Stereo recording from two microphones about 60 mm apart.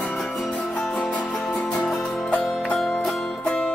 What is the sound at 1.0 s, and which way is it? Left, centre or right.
Music, left.